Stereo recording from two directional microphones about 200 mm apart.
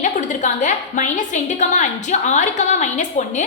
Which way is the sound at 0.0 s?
35° left (ahead or behind).